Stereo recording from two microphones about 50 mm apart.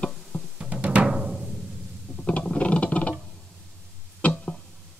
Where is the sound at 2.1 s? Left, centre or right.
Left.